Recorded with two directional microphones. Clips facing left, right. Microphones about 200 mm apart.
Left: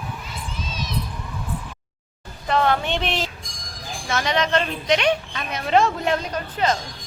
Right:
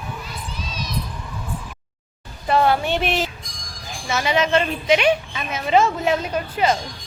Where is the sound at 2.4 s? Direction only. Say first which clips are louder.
Right 2 dB; 10° right (ahead or behind).